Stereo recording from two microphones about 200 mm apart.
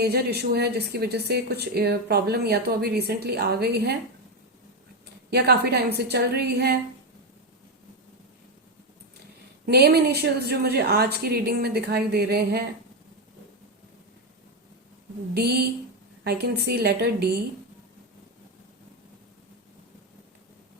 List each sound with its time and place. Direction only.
0.0 s speech: 55° right (ahead or behind)
5.3 s a woman's voice: 55° right (ahead or behind)
9.6 s speech: 55° right (ahead or behind)
15.4 s a woman's voice: 55° right (ahead or behind)